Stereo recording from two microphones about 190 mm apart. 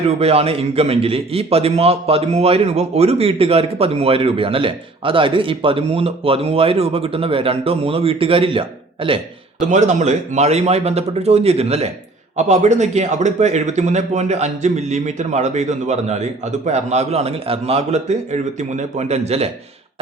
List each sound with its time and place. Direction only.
0.2 s a man's voice: 30° right (ahead or behind)